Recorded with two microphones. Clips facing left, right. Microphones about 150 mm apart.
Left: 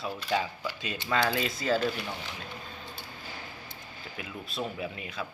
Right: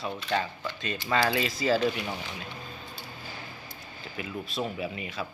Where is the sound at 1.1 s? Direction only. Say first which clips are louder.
Right 2 dB; centre (ahead or behind).